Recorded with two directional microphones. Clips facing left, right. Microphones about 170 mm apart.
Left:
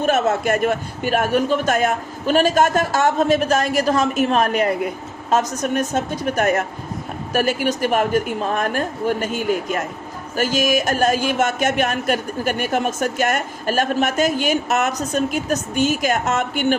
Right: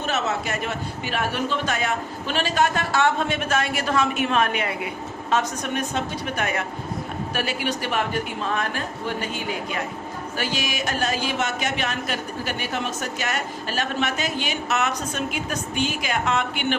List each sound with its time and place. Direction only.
0.0 s a man's voice: 50° left (ahead or behind)